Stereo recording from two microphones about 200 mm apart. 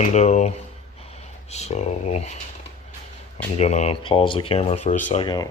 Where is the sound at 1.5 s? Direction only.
35° left (ahead or behind).